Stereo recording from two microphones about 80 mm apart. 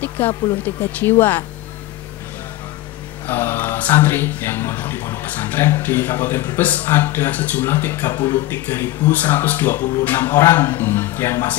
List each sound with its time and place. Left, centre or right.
0.0 s speech: left
3.3 s speech: left
8.1 s speech: left
8.5 s speech: left